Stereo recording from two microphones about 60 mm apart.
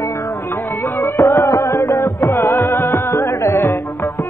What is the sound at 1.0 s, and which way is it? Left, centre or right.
Music, left.